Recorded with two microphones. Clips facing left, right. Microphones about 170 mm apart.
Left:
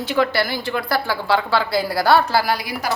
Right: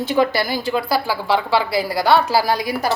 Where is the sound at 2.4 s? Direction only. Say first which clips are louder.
Right 2 dB; 20° right (ahead or behind).